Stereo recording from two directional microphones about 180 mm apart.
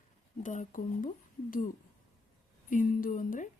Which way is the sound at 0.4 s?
45° left (ahead or behind).